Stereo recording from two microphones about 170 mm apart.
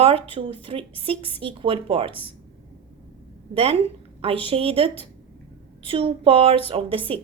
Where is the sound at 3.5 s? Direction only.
35° right (ahead or behind).